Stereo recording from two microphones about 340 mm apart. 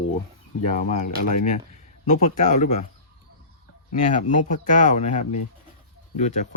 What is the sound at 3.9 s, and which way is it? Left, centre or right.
Speech, left.